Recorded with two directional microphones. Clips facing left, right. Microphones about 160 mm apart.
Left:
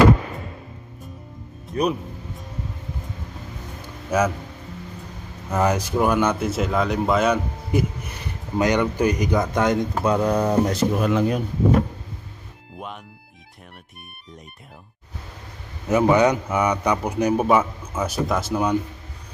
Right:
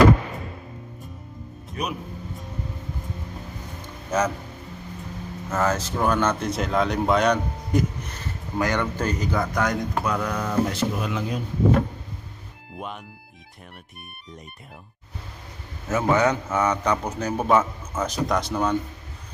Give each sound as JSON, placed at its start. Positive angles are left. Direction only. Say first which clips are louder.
{"t": 1.7, "sound": "speech", "louder": "left 8 dB", "side_deg": 35}
{"t": 4.1, "sound": "a man's voice", "louder": "left 3 dB", "side_deg": 10}
{"t": 5.5, "sound": "a man's voice", "louder": "left 3 dB", "side_deg": 15}
{"t": 15.9, "sound": "a man's voice", "louder": "left 4 dB", "side_deg": 15}